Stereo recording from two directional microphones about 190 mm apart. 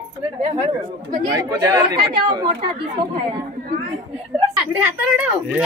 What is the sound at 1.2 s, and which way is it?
Speech, 20° right (ahead or behind).